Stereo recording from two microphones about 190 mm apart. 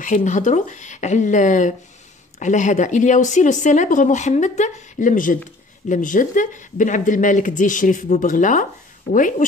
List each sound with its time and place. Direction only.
0.0 s speech: 40° left (ahead or behind)